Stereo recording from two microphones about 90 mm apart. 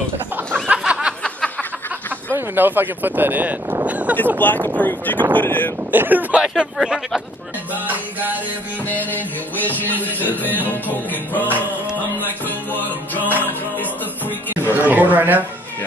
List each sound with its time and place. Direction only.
0.7 s a sound: 10° right (ahead or behind)
1.2 s a sound: 10° left (ahead or behind)
2.3 s speech: 20° right (ahead or behind)
3.8 s a sound: 15° right (ahead or behind)
4.4 s music: 20° left (ahead or behind)
5.9 s speech: 20° right (ahead or behind)
6.4 s speech: 5° right (ahead or behind)
7.8 s music: 20° right (ahead or behind)
8.8 s music: 20° left (ahead or behind)
10.2 s speech: 20° right (ahead or behind)
10.6 s music: 20° left (ahead or behind)
14.7 s speech: 20° right (ahead or behind)